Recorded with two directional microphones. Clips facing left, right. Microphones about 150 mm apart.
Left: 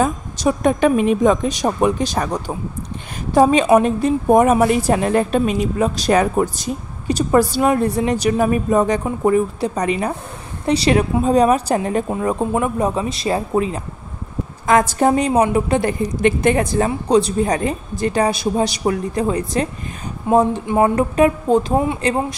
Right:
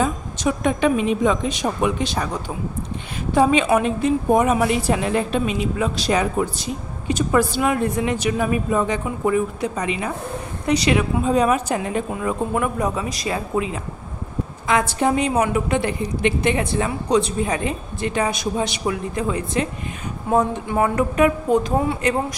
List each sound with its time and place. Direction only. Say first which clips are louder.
0.0 s a woman's voice: left 3 dB; 40° left (ahead or behind)